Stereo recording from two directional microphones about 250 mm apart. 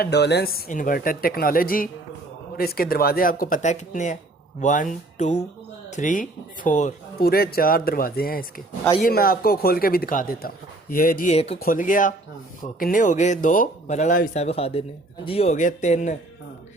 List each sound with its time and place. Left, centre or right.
0.0 s a man's voice: left